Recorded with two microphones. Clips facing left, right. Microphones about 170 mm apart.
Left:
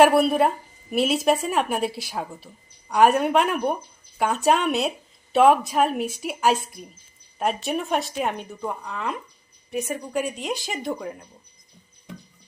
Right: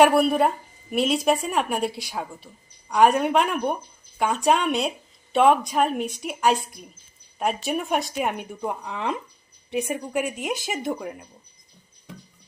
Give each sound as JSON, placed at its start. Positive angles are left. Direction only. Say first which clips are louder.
{"t": 0.0, "sound": "speech", "louder": "left 1 dB", "side_deg": 0}
{"t": 9.7, "sound": "speech", "louder": "right 1 dB", "side_deg": -10}